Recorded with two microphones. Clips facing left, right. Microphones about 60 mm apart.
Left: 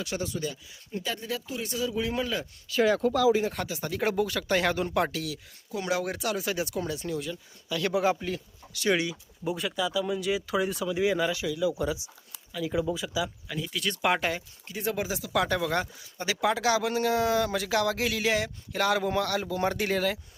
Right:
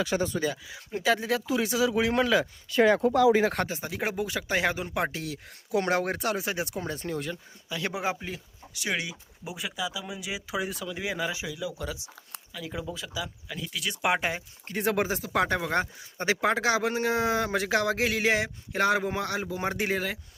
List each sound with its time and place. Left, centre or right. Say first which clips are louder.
0.1 s speech: right 5 dB; right
3.8 s speech: left 3 dB; centre
5.7 s speech: right 3 dB; right
6.9 s speech: even; right
7.7 s speech: left 5 dB; right; by 11.3 s centre
11.3 s speech: left 4 dB; centre
11.6 s speech: left 7 dB; centre
13.9 s speech: even; centre
14.7 s speech: right 4 dB; right
15.0 s speech: right 1 dB; right; by 20.1 s centre